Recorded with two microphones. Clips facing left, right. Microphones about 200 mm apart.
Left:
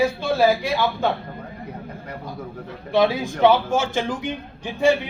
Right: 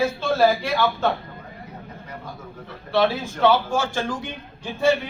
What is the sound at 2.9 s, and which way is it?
A man's voice, 15° left (ahead or behind).